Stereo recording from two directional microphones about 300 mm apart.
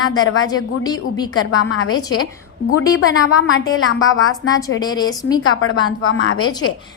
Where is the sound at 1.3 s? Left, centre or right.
Left.